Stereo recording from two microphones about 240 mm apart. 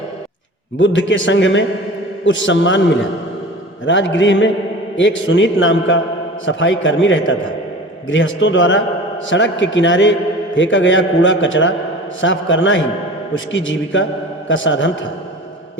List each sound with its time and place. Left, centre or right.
0.8 s a man's voice: left